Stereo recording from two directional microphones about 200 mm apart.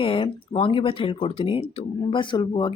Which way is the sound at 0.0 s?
25° left (ahead or behind).